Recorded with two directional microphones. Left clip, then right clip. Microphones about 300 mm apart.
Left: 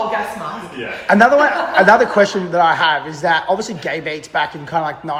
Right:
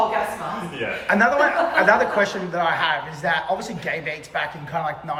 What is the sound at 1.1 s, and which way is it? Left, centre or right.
A man's voice, centre.